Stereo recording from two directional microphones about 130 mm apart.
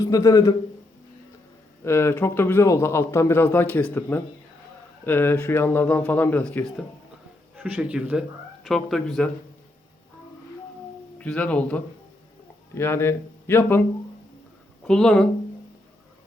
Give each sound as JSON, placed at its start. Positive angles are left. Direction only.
{"t": 0.0, "sound": "a man's voice", "side_deg": 25}
{"t": 1.8, "sound": "a man's voice", "side_deg": 20}
{"t": 7.5, "sound": "a man's voice", "side_deg": -10}
{"t": 8.6, "sound": "speech", "side_deg": 5}
{"t": 11.2, "sound": "a man's voice", "side_deg": 10}
{"t": 14.8, "sound": "speech", "side_deg": 5}